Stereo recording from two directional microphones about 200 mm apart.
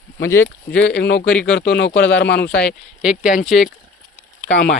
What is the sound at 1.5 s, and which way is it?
Speech, 60° left (ahead or behind).